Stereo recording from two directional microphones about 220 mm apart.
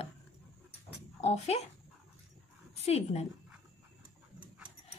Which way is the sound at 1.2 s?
30° left (ahead or behind).